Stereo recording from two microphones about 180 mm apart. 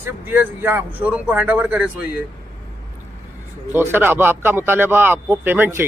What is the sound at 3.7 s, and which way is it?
Speech, 10° right (ahead or behind).